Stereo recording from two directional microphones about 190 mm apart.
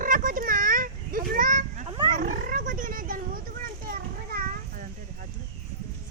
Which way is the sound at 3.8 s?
50° right (ahead or behind).